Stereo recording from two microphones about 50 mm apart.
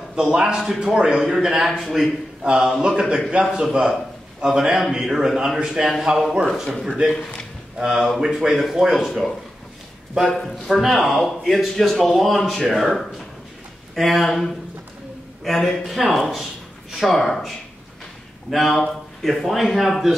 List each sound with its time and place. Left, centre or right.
0.1 s a man's voice: centre
1.7 s speech: centre
2.4 s a man's voice: centre
7.1 s a man's voice: centre
8.2 s a man's voice: centre
10.3 s speech: centre
15.4 s speech: centre
18.5 s speech: centre